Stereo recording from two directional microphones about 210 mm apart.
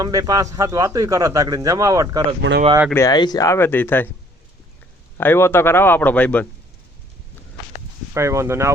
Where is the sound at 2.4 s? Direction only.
60° right (ahead or behind).